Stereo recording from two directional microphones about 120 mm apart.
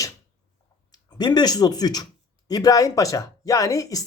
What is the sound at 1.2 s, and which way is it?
Speech, 35° left (ahead or behind).